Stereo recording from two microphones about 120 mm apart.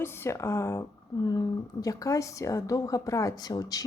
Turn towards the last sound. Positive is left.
turn(degrees=30)  # may be behind; listen again after turning